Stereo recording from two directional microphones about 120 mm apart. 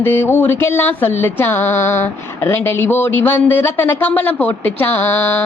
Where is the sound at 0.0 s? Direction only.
20° left (ahead or behind).